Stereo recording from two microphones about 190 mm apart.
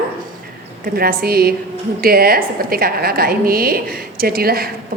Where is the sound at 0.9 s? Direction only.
55° right (ahead or behind).